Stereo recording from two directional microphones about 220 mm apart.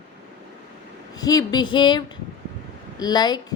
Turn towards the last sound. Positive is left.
turn(degrees=20)  # may be behind; listen again after turning